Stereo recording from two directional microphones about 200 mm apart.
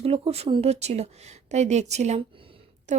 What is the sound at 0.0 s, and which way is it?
A woman's voice, 30° right (ahead or behind).